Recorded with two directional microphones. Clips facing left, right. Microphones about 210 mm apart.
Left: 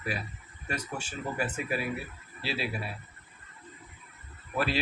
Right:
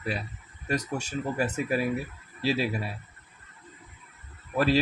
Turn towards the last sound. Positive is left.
turn(degrees=-40)  # may be behind; listen again after turning